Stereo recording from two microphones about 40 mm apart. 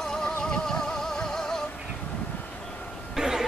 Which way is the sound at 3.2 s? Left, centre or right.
Centre.